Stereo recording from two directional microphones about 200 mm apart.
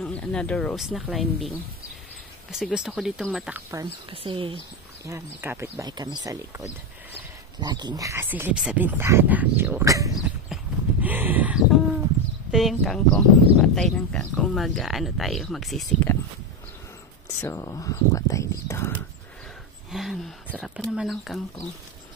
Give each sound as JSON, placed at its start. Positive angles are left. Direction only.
{"t": 0.0, "sound": "speech", "side_deg": 5}
{"t": 4.1, "sound": "speech", "side_deg": -25}
{"t": 5.0, "sound": "speech", "side_deg": -10}
{"t": 7.6, "sound": "speech", "side_deg": -20}
{"t": 10.2, "sound": "horse", "side_deg": -5}
{"t": 12.4, "sound": "speech", "side_deg": 0}
{"t": 17.4, "sound": "speech", "side_deg": 15}
{"t": 19.9, "sound": "speech", "side_deg": 0}